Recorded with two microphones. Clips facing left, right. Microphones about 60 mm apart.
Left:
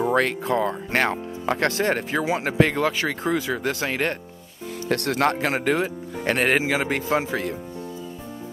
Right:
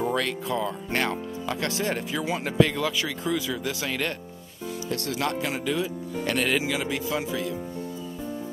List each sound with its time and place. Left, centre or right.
0.1 s speech: left
4.8 s speech: left